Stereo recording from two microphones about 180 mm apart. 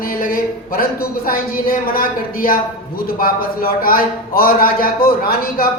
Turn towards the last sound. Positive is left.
turn(degrees=55)  # may be behind; listen again after turning